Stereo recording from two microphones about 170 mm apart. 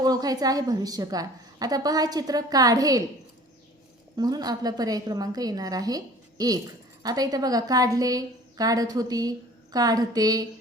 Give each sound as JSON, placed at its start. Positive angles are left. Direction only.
{"t": 0.0, "sound": "a woman's voice", "side_deg": -20}
{"t": 4.2, "sound": "a woman's voice", "side_deg": -20}